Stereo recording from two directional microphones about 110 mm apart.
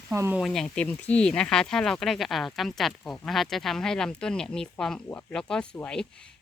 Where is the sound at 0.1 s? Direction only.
25° right (ahead or behind).